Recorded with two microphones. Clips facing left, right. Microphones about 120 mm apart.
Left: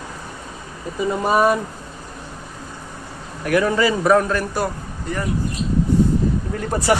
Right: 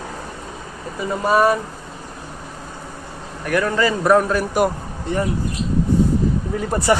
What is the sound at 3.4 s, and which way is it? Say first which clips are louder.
Speech: left 1 dB; 10° left (ahead or behind).